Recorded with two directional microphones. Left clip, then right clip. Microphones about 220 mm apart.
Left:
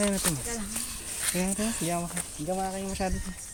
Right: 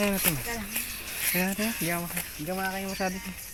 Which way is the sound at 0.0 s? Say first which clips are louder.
Right 1 dB; 5° left (ahead or behind).